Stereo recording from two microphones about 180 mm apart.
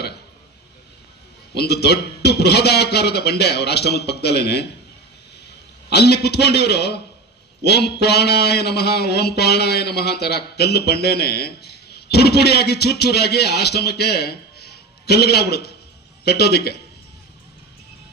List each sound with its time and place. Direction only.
1.5 s speech: 65° left (ahead or behind)
5.9 s speech: 65° left (ahead or behind)